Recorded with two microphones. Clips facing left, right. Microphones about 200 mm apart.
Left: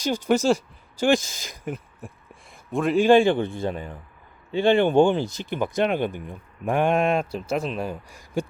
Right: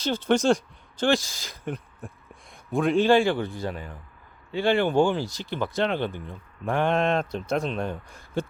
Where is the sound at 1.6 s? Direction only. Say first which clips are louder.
Left 1 dB; centre (ahead or behind).